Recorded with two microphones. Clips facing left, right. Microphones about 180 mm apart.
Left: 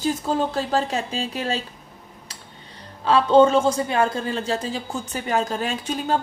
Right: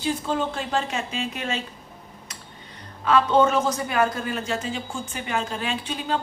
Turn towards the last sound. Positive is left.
turn(degrees=45)  # may be behind; listen again after turning